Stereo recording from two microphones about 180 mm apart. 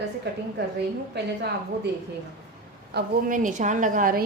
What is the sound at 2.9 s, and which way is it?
A woman's voice, 50° right (ahead or behind).